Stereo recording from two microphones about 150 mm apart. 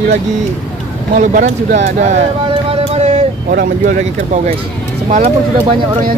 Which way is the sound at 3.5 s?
60° right (ahead or behind).